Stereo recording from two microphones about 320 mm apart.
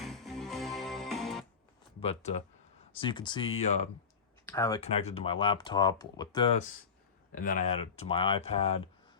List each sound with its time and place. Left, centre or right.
0.0 s music: centre
2.0 s speech: centre
4.4 s speech: centre
7.3 s speech: left